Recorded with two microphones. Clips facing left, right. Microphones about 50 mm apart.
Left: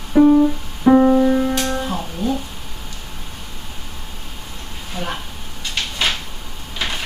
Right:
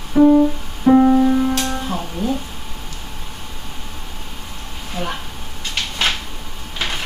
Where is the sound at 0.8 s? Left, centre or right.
Centre.